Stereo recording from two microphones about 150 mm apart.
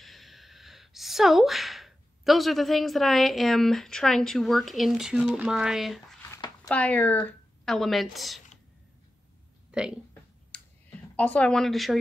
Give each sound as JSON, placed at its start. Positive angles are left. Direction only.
{"t": 0.0, "sound": "speech", "side_deg": 0}
{"t": 6.3, "sound": "a sound", "side_deg": 25}
{"t": 6.7, "sound": "a woman's voice", "side_deg": 10}
{"t": 9.7, "sound": "a sound", "side_deg": -5}
{"t": 10.5, "sound": "clicking", "side_deg": 5}
{"t": 11.1, "sound": "a woman's voice", "side_deg": 10}